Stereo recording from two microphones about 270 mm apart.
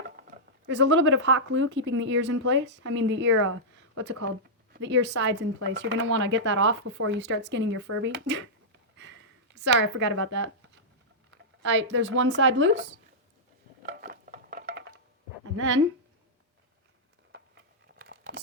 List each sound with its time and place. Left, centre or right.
0.7 s a woman's voice: right
9.6 s speech: right
11.6 s speech: right
13.8 s a sound: right
15.5 s speech: right
17.9 s patter: right